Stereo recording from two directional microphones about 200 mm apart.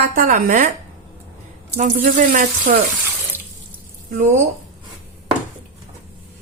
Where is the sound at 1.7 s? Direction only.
40° right (ahead or behind).